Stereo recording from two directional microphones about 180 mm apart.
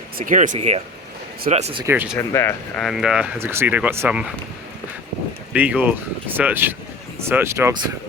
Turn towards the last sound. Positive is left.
turn(degrees=-15)  # may be behind; listen again after turning